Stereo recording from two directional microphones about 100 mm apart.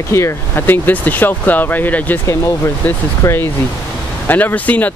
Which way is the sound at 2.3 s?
30° left (ahead or behind).